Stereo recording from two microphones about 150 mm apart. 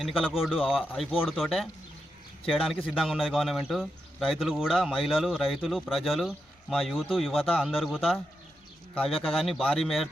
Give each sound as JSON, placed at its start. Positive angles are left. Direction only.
{"t": 0.0, "sound": "a man's voice", "side_deg": -5}
{"t": 9.2, "sound": "a man's voice", "side_deg": 0}